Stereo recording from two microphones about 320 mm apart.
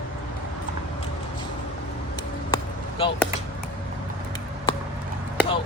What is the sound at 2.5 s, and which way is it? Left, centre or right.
Basketball bounce, centre.